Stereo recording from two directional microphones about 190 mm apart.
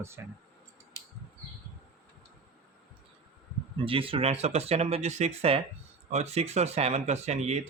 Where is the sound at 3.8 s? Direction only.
30° right (ahead or behind).